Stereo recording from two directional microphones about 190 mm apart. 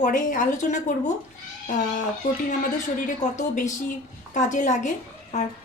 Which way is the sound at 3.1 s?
40° left (ahead or behind).